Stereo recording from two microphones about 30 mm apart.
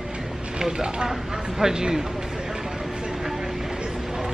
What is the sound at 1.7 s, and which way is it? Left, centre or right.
Speech, right.